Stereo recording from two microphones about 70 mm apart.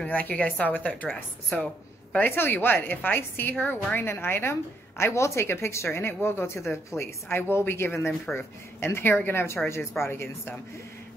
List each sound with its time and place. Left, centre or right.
0.0 s a woman's voice: left
2.1 s a woman's voice: left